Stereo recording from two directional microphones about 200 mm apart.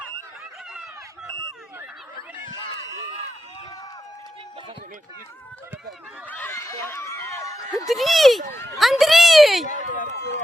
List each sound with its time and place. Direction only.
6.2 s a sound: 10° left (ahead or behind)
7.9 s speech: centre (ahead or behind)
9.6 s run: 40° left (ahead or behind)